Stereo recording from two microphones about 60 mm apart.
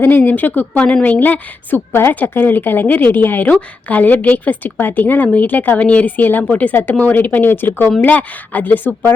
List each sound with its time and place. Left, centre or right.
0.0 s a woman's voice: left
1.9 s a woman's voice: left